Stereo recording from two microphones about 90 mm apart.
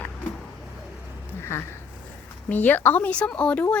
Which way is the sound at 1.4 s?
30° left (ahead or behind).